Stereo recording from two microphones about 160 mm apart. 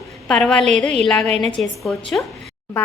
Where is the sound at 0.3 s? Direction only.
5° left (ahead or behind).